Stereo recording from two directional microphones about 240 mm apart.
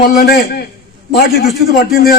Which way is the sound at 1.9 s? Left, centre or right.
Left.